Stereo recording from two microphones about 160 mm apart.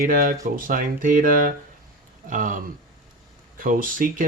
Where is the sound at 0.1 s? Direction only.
60° right (ahead or behind).